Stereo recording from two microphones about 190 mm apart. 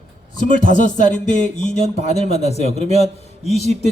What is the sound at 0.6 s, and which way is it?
Speech, 40° left (ahead or behind).